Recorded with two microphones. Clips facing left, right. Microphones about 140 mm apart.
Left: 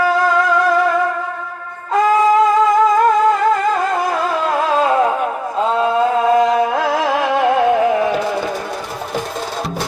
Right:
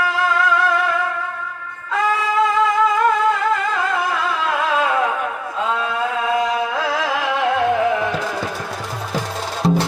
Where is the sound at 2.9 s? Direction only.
40° left (ahead or behind).